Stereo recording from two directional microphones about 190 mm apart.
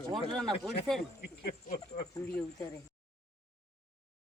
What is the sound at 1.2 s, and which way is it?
Speech, 55° left (ahead or behind).